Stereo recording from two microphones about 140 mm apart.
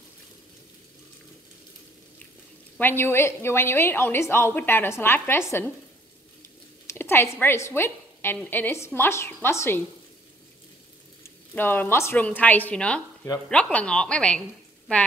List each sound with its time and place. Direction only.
2.8 s a woman's voice: 15° left (ahead or behind)
6.9 s a woman's voice: 15° left (ahead or behind)
11.2 s a woman's voice: 15° left (ahead or behind)